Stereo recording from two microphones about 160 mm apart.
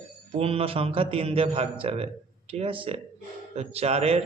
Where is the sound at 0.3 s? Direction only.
35° right (ahead or behind).